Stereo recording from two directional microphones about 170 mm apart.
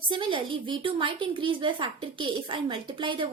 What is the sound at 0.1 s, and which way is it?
A woman's voice, 30° right (ahead or behind).